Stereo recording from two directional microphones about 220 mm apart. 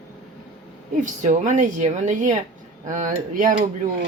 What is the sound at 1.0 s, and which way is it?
A woman's voice, 35° right (ahead or behind).